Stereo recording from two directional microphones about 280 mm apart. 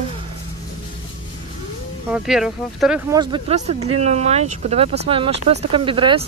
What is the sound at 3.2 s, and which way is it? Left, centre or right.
Speech, centre.